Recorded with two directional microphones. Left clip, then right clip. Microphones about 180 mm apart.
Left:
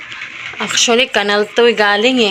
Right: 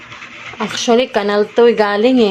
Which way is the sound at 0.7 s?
20° right (ahead or behind).